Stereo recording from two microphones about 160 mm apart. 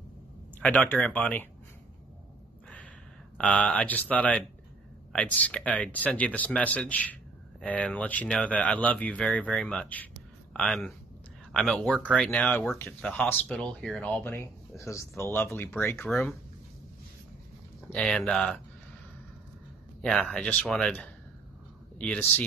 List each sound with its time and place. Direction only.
0.6 s speech: 5° left (ahead or behind)
3.3 s speech: 10° left (ahead or behind)
16.1 s speech: centre (ahead or behind)
17.8 s speech: 5° left (ahead or behind)
20.0 s speech: 5° left (ahead or behind)